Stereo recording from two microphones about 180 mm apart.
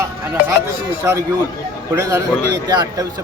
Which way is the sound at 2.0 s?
15° right (ahead or behind).